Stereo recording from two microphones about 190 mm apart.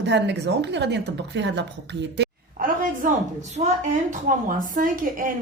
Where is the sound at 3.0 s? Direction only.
45° right (ahead or behind).